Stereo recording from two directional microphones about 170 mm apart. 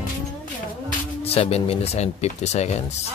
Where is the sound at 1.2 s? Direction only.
35° left (ahead or behind).